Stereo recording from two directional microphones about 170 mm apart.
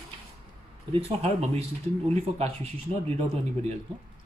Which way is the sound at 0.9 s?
35° right (ahead or behind).